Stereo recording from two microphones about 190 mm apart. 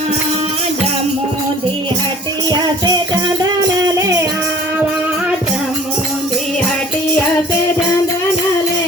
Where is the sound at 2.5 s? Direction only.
20° right (ahead or behind).